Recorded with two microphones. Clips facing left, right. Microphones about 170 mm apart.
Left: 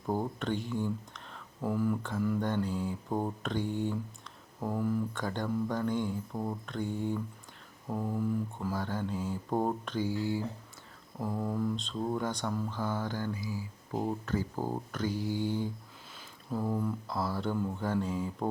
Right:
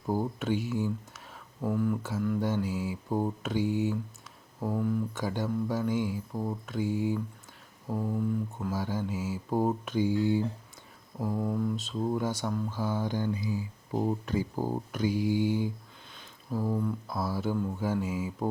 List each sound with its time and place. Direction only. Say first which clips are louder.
0.0 s speech: right 2 dB; 5° right (ahead or behind)
11.2 s speech: right 2 dB; 5° right (ahead or behind)
13.9 s speech: right 3 dB; 5° right (ahead or behind)